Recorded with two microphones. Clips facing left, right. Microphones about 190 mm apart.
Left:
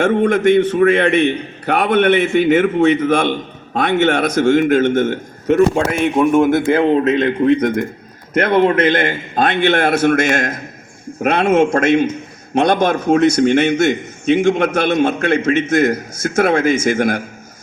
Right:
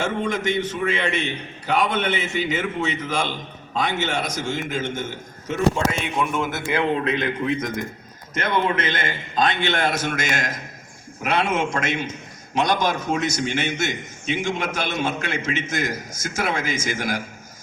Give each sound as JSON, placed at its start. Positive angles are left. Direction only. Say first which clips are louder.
{"t": 0.0, "sound": "a man's voice", "louder": "left 11 dB", "side_deg": 60}
{"t": 6.8, "sound": "a man's voice", "louder": "left 9 dB", "side_deg": 40}
{"t": 7.3, "sound": "a man's voice", "louder": "left 10 dB", "side_deg": 60}